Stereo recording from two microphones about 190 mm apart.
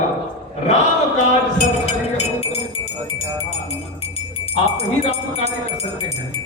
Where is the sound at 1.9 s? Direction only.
35° left (ahead or behind).